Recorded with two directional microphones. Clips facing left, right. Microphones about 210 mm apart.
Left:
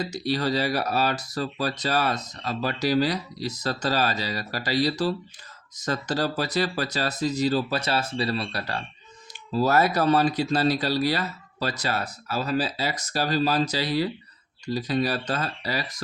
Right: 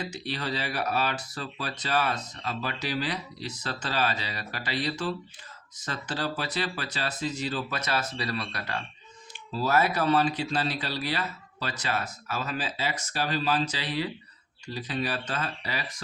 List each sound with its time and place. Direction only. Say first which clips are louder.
0.0 s speech: left 7 dB; 40° left (ahead or behind)